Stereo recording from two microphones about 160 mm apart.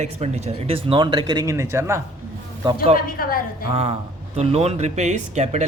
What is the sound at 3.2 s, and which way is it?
Speech, 65° left (ahead or behind).